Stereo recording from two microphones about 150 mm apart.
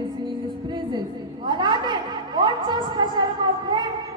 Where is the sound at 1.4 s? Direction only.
30° right (ahead or behind).